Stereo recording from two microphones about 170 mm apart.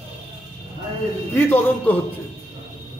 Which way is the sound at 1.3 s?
10° left (ahead or behind).